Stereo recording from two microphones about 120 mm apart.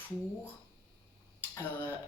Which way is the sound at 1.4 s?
20° left (ahead or behind).